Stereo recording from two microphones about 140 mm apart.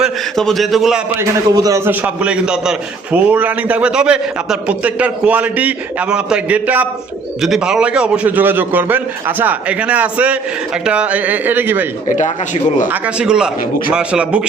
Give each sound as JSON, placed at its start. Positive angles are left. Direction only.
{"t": 0.0, "sound": "a man's voice", "side_deg": 0}
{"t": 1.5, "sound": "a man's voice", "side_deg": -25}
{"t": 12.0, "sound": "speech", "side_deg": 60}
{"t": 12.9, "sound": "a man's voice", "side_deg": -5}